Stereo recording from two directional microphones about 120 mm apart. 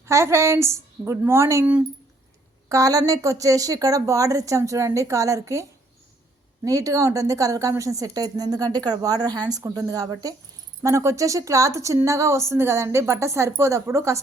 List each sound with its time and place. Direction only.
0.0 s a woman's voice: 25° right (ahead or behind)
2.6 s a woman's voice: 30° right (ahead or behind)
6.7 s a woman's voice: 30° right (ahead or behind)